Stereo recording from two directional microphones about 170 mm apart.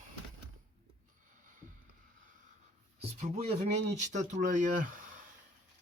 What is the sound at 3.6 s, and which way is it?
Speech, 45° right (ahead or behind).